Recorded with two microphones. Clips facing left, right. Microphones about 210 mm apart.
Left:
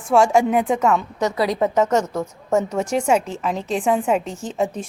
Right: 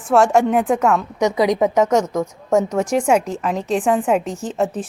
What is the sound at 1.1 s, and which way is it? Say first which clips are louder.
Speech: right 4 dB; 15° right (ahead or behind).